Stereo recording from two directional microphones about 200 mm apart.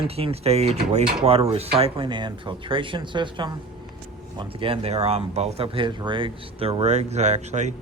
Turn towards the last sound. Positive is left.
turn(degrees=-35)  # may be behind; listen again after turning